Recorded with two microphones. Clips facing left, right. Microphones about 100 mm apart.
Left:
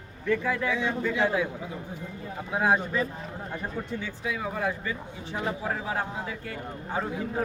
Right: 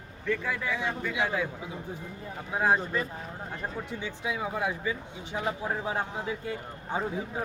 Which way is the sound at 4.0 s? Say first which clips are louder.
Even; 20° right (ahead or behind).